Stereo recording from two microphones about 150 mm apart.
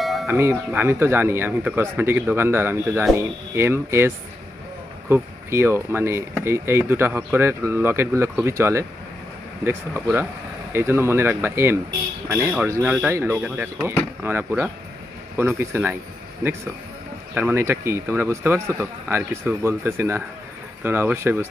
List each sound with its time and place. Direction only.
0.0 s doorbell: centre (ahead or behind)
0.3 s speech: 15° right (ahead or behind)
5.1 s speech: 15° right (ahead or behind)
17.3 s speech: 15° right (ahead or behind)